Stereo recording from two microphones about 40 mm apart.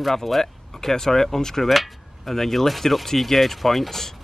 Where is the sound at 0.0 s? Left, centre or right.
Centre.